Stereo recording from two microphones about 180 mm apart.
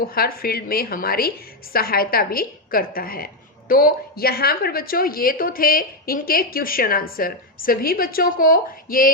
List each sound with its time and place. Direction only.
0.1 s a woman's voice: 55° left (ahead or behind)